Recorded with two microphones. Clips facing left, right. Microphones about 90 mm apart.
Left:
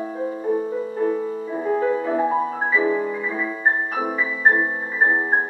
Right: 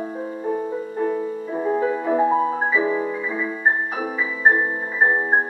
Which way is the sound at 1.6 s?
10° right (ahead or behind).